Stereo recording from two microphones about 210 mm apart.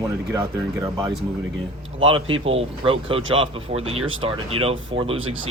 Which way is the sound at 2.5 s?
25° right (ahead or behind).